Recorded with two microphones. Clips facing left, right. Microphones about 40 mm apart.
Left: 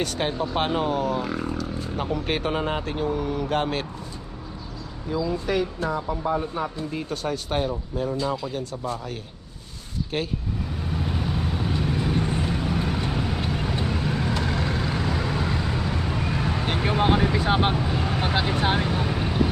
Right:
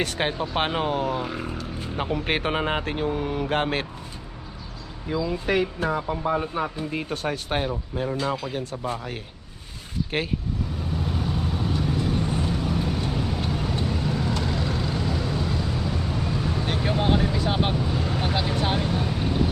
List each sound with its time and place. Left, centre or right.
0.0 s speech: centre
5.0 s speech: right
5.5 s speech: right
10.8 s vehicle: centre; by 16.6 s left
16.6 s vehicle: centre